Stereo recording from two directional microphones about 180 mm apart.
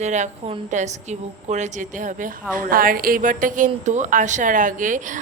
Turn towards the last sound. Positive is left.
turn(degrees=-45)  # may be behind; listen again after turning